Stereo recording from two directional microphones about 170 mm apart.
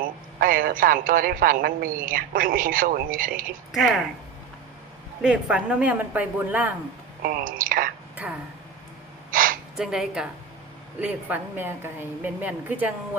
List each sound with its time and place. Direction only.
0.3 s a woman's voice: 55° right (ahead or behind)
3.7 s speech: centre (ahead or behind)
5.2 s a woman's voice: 5° right (ahead or behind)
7.2 s a woman's voice: 55° right (ahead or behind)
8.1 s a sound: 10° right (ahead or behind)
9.3 s gasp: 55° right (ahead or behind)
9.7 s a woman's voice: 5° right (ahead or behind)